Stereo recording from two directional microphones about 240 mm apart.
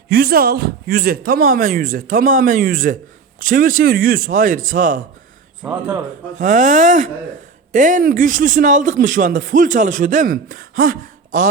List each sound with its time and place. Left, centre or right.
0.1 s speech: right
5.6 s speech: centre
6.4 s speech: right